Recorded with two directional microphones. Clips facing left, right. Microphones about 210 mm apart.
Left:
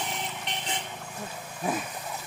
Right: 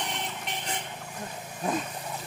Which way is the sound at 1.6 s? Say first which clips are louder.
Right 1 dB; 5° left (ahead or behind).